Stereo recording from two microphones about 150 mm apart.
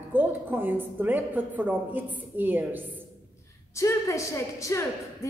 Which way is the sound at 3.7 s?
20° left (ahead or behind).